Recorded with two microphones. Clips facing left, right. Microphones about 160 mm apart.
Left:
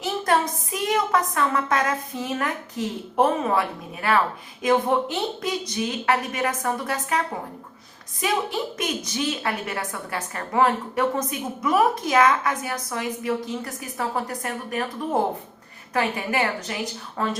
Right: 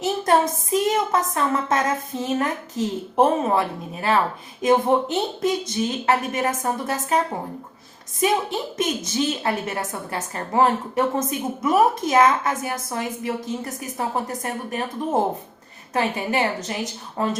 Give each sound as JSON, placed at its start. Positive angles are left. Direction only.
{"t": 0.0, "sound": "a woman's voice", "side_deg": -25}
{"t": 4.6, "sound": "a woman's voice", "side_deg": -25}
{"t": 8.2, "sound": "a woman's voice", "side_deg": -25}
{"t": 15.9, "sound": "a woman's voice", "side_deg": -25}